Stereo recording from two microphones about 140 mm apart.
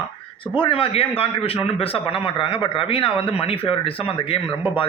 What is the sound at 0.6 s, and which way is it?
Speech, 40° left (ahead or behind).